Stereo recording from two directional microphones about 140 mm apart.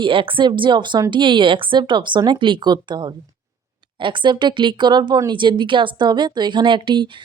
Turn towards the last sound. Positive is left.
turn(degrees=-35)  # may be behind; listen again after turning